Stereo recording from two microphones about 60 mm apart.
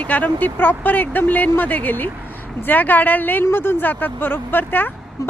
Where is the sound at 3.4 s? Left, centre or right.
Left.